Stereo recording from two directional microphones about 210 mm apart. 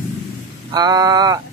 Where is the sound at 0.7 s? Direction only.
20° right (ahead or behind).